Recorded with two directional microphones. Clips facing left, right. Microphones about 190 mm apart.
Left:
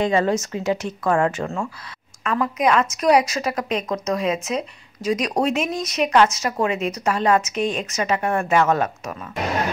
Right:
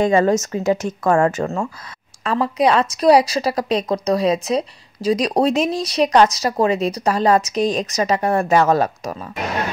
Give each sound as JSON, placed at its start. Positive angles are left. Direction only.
{"t": 0.0, "sound": "speech", "side_deg": -45}
{"t": 2.2, "sound": "a woman's voice", "side_deg": -30}